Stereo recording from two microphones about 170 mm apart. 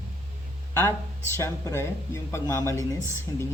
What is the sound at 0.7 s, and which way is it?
A woman's voice, 15° left (ahead or behind).